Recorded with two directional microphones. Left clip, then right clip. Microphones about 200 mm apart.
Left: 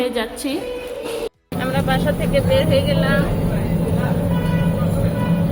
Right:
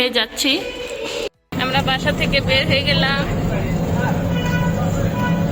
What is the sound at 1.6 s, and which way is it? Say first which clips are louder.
Speech: right 2 dB; 5° left (ahead or behind).